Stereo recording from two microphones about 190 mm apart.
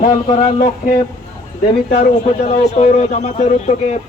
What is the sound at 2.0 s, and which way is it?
Speech, 35° left (ahead or behind).